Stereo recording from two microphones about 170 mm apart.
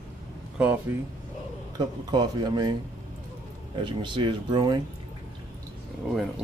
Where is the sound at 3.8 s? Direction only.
25° right (ahead or behind).